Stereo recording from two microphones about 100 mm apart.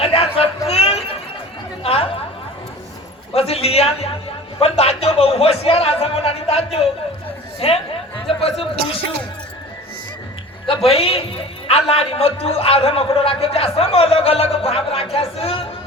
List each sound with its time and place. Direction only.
0.0 s chatter: 75° left (ahead or behind)
3.3 s a sound: 85° left
4.6 s speech: 90° left
7.6 s a man's voice: 75° left (ahead or behind)
10.7 s a man's voice: 75° left (ahead or behind)